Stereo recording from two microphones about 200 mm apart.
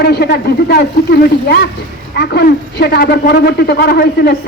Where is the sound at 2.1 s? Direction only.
55° left (ahead or behind).